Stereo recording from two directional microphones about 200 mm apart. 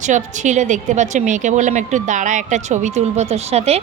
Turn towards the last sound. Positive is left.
turn(degrees=-30)  # may be behind; listen again after turning